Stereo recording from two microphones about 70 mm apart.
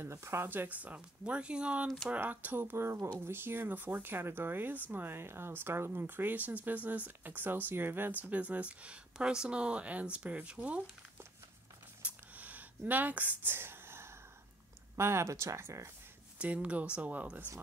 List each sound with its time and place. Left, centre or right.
0.0 s speech: right; by 1.9 s centre
2.1 s speech: right
12.0 s a sound: right
15.0 s speech: right
16.3 s speech: centre